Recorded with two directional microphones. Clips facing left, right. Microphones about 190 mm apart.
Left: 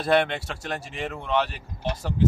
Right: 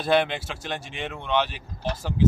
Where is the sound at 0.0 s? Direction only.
Centre (ahead or behind).